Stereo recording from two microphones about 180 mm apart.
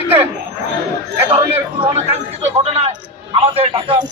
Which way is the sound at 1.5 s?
35° right (ahead or behind).